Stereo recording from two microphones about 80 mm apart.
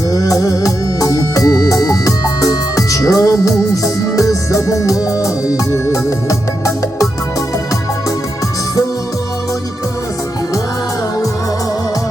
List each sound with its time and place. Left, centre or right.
0.1 s music: left